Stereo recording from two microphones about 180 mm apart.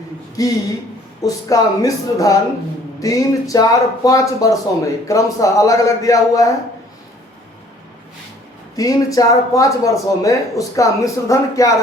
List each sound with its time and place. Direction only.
0.4 s speech: 20° left (ahead or behind)
8.7 s speech: 20° left (ahead or behind)